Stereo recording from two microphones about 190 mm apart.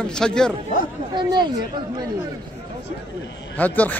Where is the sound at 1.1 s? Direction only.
25° right (ahead or behind).